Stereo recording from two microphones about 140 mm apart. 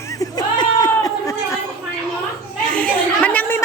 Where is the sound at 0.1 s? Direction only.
25° left (ahead or behind).